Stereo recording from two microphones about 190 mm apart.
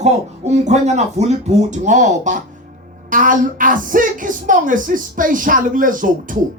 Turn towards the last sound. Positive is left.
turn(degrees=-45)  # may be behind; listen again after turning